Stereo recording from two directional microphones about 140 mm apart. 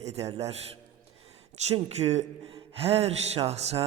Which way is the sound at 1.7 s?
50° right (ahead or behind).